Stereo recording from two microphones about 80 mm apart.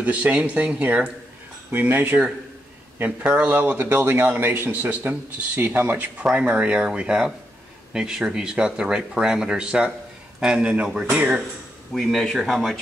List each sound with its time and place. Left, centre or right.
0.0 s a man's voice: centre
3.3 s a man's voice: right
11.9 s speech: centre